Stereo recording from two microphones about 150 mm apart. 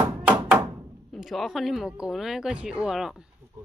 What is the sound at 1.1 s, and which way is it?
Speech, centre (ahead or behind).